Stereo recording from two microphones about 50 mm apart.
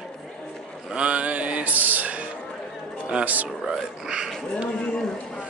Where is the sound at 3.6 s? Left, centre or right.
Centre.